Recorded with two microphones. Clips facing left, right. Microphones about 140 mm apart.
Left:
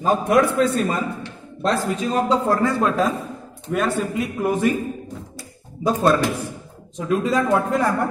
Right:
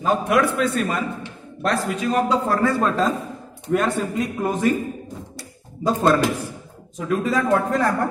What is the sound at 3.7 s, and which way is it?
Speech, 5° left (ahead or behind).